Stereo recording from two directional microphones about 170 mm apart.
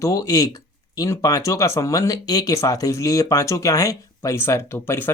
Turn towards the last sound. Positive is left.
turn(degrees=15)  # may be behind; listen again after turning